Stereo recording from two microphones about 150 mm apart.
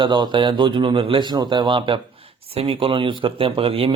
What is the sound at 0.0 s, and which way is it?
Speech, 30° right (ahead or behind).